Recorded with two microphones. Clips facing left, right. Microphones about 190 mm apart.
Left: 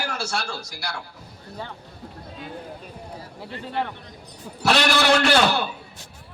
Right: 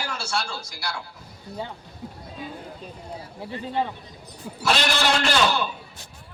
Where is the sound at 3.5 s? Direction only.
15° right (ahead or behind).